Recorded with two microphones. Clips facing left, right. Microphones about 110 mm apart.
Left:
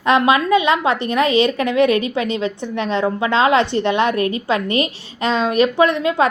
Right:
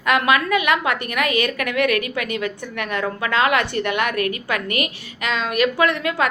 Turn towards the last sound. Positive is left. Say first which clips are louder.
# left 5 dB
turn(degrees=20)  # may be behind; listen again after turning